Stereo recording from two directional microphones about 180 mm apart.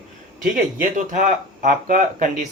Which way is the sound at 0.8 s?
45° right (ahead or behind).